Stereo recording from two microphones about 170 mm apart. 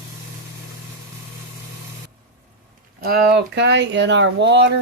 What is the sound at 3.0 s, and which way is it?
Speech, 75° right (ahead or behind).